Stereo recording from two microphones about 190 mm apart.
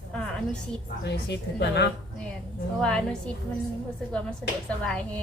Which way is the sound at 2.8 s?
5° left (ahead or behind).